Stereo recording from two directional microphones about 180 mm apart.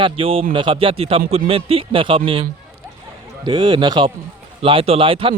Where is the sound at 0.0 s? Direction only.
30° right (ahead or behind).